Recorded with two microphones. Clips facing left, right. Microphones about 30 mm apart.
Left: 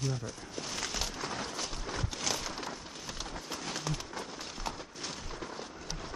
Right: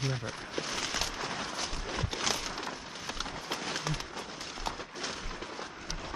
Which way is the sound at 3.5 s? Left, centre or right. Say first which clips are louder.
Right 1 dB; centre.